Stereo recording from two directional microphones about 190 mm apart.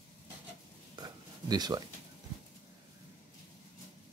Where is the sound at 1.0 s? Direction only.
20° right (ahead or behind).